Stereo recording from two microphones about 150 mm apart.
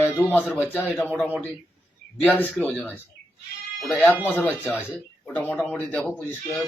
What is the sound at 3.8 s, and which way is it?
Speech, 10° left (ahead or behind).